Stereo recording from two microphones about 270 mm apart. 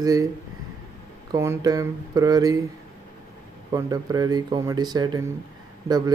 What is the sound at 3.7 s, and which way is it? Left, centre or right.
Speech, centre.